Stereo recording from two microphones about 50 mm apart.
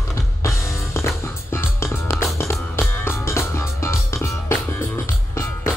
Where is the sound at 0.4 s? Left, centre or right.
Left.